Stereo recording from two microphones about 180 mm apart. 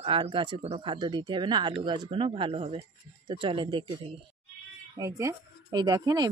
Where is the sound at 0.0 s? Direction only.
30° right (ahead or behind).